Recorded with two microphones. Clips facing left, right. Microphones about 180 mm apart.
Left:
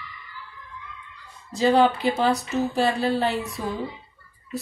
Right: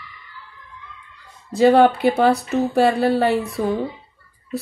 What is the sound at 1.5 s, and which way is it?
Speech, 60° right (ahead or behind).